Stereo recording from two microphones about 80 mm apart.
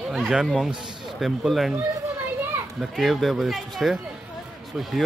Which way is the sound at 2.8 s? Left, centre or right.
Centre.